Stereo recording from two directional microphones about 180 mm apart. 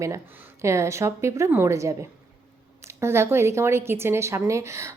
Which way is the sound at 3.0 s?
15° right (ahead or behind).